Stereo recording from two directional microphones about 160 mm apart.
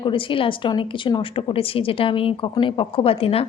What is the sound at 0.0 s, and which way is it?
Speech, 30° left (ahead or behind).